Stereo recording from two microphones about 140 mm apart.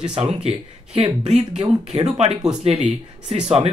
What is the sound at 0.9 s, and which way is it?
Speech, 50° right (ahead or behind).